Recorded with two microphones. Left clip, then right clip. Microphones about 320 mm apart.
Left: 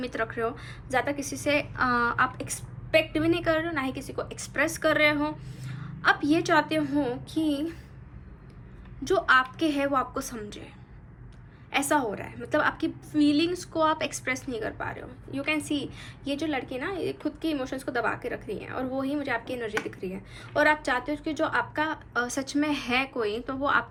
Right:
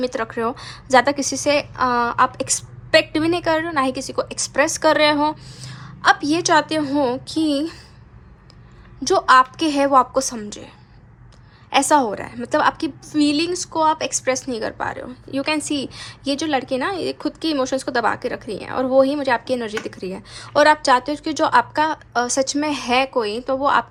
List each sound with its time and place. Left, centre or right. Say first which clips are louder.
0.0 s a woman's voice: right 7 dB; centre
9.0 s a woman's voice: right 9 dB; centre
11.7 s a woman's voice: right 10 dB; centre